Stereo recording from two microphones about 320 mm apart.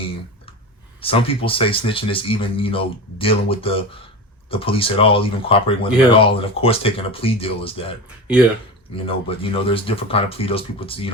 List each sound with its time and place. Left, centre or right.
1.0 s speech: centre
9.0 s speech: centre